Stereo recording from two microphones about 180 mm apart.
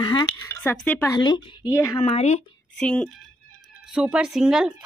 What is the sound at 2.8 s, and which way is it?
Speech, 5° left (ahead or behind).